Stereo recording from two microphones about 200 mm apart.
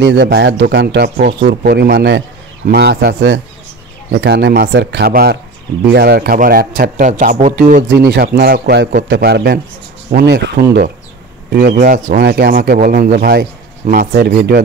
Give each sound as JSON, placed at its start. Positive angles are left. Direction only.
{"t": 0.0, "sound": "a man's voice", "side_deg": -60}
{"t": 8.1, "sound": "a man's voice", "side_deg": -50}
{"t": 11.5, "sound": "speech", "side_deg": -45}